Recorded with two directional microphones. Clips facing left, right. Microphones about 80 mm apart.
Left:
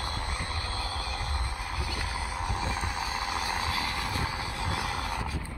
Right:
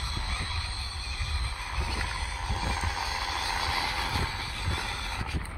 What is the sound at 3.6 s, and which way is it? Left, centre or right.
Vehicle, centre.